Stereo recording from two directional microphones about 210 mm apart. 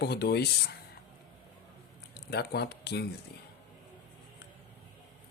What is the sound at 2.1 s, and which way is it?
Speech, 50° left (ahead or behind).